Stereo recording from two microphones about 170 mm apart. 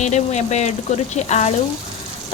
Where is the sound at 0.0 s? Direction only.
40° left (ahead or behind).